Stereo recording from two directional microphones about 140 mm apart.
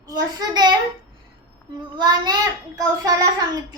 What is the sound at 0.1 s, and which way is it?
Speech, 30° right (ahead or behind).